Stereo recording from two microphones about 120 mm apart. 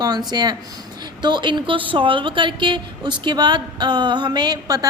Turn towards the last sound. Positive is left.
turn(degrees=-35)  # may be behind; listen again after turning